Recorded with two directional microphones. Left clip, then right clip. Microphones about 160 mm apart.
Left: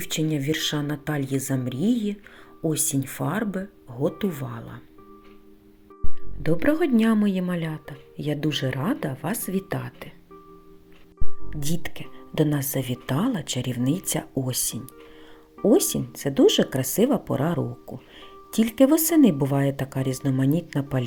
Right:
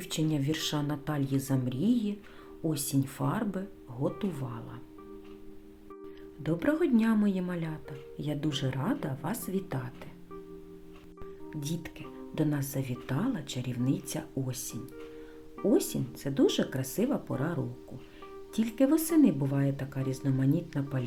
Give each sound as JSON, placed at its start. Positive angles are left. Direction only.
{"t": 0.0, "sound": "a woman's voice", "side_deg": 20}
{"t": 6.4, "sound": "a woman's voice", "side_deg": 20}
{"t": 11.5, "sound": "a woman's voice", "side_deg": 30}